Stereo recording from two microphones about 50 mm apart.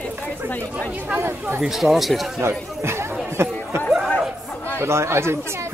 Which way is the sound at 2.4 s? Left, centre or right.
Right.